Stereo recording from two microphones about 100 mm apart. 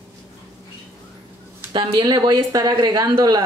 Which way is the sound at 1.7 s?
45° right (ahead or behind).